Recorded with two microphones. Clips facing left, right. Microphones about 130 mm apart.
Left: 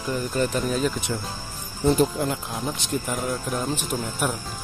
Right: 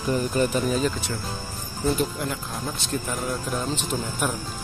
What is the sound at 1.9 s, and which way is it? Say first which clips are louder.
Speech: left 5 dB; 25° left (ahead or behind).